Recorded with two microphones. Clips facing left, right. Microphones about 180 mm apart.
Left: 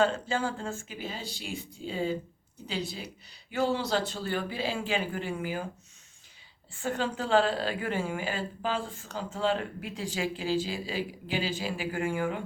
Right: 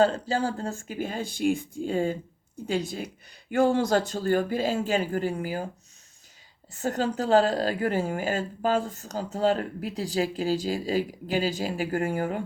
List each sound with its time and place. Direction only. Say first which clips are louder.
0.0 s speech: right 4 dB; 35° right (ahead or behind)
6.7 s a woman's voice: right 4 dB; 40° right (ahead or behind)